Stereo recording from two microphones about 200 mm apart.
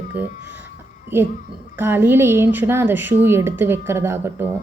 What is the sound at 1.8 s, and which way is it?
A woman's voice, 10° right (ahead or behind).